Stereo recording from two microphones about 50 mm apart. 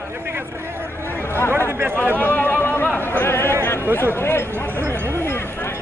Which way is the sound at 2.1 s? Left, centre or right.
Left.